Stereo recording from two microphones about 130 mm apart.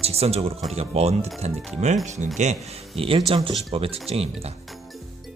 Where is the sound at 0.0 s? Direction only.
50° right (ahead or behind).